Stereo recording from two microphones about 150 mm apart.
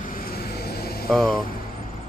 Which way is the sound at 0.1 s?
80° left.